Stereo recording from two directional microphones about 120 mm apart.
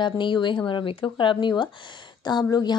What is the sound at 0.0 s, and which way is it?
A woman's voice, 40° left (ahead or behind).